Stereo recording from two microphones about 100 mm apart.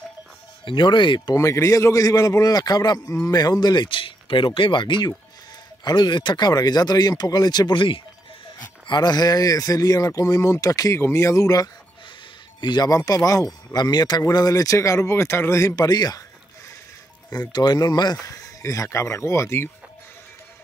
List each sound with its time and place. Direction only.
0.7 s speech: 55° left (ahead or behind)
1.3 s speech: 30° left (ahead or behind)
12.5 s speech: 45° left (ahead or behind)
17.3 s speech: 45° left (ahead or behind); by 19.7 s 25° left (ahead or behind)